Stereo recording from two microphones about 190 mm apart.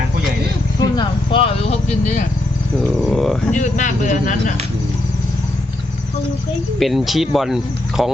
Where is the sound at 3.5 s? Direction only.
40° left (ahead or behind).